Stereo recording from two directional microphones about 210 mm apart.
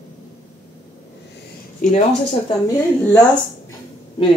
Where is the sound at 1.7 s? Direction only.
35° left (ahead or behind).